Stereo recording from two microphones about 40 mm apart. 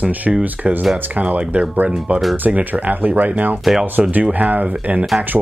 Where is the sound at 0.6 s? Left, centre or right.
Right.